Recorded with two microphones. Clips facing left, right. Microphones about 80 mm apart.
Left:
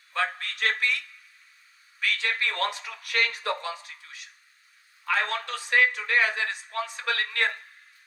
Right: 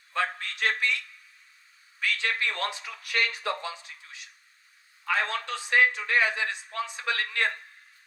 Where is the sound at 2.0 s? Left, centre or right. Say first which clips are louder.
Even; right.